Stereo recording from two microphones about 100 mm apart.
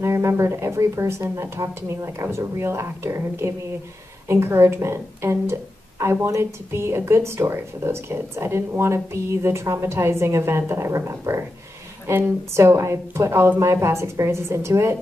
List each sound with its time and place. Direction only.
0.0 s a woman's voice: 25° right (ahead or behind)